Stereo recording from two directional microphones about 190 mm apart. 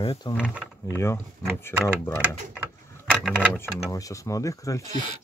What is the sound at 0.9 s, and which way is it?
Speech, 15° left (ahead or behind).